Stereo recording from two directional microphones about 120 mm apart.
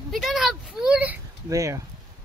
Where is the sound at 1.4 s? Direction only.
25° right (ahead or behind).